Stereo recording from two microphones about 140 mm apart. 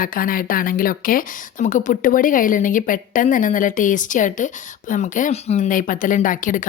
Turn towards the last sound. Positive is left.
turn(degrees=70)  # may be behind; listen again after turning